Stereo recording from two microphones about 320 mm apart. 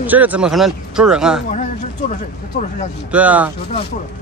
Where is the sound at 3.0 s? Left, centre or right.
Centre.